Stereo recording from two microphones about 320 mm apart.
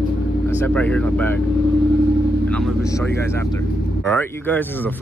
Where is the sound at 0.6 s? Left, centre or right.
Centre.